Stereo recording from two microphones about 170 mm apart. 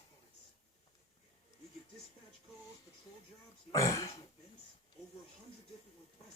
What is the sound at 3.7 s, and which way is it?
Throat clearing, 20° left (ahead or behind).